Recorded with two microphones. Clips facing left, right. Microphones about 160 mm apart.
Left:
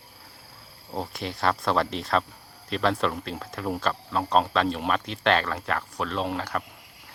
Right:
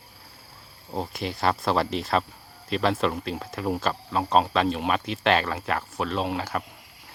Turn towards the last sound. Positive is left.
turn(degrees=-5)  # may be behind; listen again after turning